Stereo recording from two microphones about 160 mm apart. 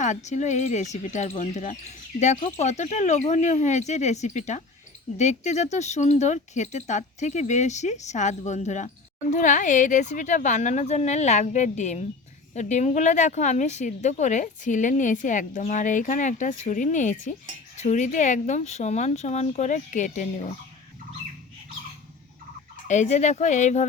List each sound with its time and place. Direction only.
0.0 s speech: 45° left (ahead or behind)
22.9 s speech: 50° left (ahead or behind)